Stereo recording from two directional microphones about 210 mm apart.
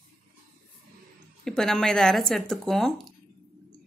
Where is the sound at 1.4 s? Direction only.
Centre (ahead or behind).